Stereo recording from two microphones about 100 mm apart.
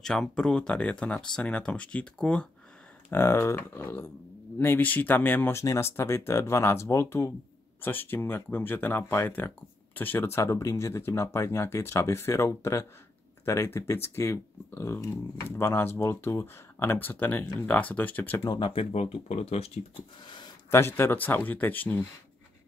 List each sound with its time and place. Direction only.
0.0 s speech: 5° left (ahead or behind)
3.1 s speech: 25° left (ahead or behind)
18.6 s speech: 65° left (ahead or behind); by 19.8 s 90° left
20.2 s a sound: 50° left (ahead or behind)
20.7 s speech: 25° left (ahead or behind)